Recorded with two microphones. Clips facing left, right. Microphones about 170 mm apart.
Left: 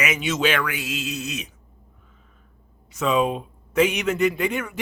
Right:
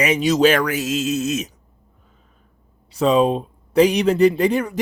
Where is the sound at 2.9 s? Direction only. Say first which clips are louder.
Right 5 dB; 35° right (ahead or behind).